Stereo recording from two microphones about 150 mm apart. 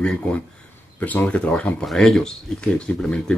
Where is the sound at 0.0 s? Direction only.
5° left (ahead or behind).